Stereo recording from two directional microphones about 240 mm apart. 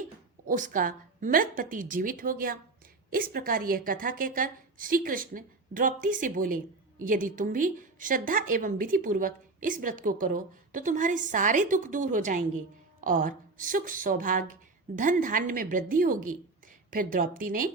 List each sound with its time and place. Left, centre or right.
0.4 s speech: right